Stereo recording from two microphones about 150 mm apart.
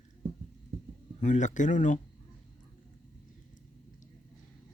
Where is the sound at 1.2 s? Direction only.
55° left (ahead or behind).